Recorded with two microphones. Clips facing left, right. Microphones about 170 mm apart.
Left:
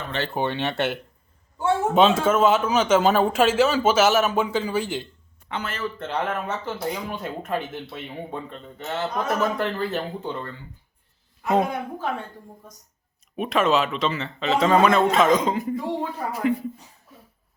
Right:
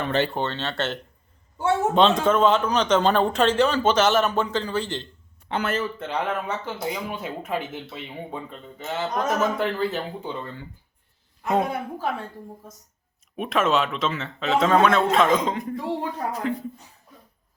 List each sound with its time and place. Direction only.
0.3 s speech: 15° left (ahead or behind)
5.5 s speech: 50° right (ahead or behind)
6.0 s a man's voice: centre (ahead or behind)
11.4 s a man's voice: centre (ahead or behind)
13.3 s a man's voice: centre (ahead or behind)